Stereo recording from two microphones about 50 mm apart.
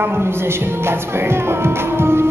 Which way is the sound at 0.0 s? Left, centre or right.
Right.